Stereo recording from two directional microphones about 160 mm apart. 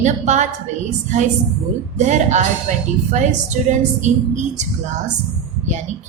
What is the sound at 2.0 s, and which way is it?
Speech, 50° right (ahead or behind).